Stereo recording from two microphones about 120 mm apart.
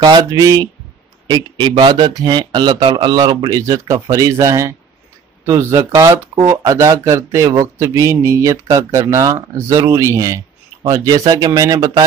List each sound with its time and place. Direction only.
0.0 s a man's voice: 35° right (ahead or behind)